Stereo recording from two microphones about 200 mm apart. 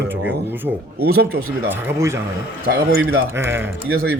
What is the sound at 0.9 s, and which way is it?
Speech, 50° right (ahead or behind).